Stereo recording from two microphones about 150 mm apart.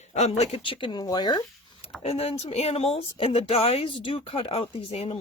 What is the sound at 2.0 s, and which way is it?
Speech, 40° left (ahead or behind).